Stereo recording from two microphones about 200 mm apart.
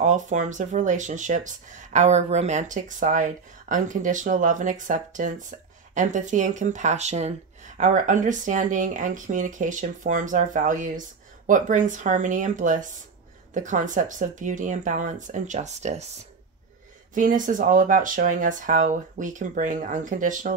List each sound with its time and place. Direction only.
0.0 s speech: 35° right (ahead or behind)